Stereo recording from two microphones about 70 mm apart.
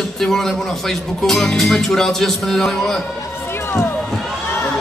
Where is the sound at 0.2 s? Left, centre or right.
Centre.